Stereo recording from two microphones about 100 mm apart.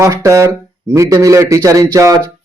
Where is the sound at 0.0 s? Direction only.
30° right (ahead or behind).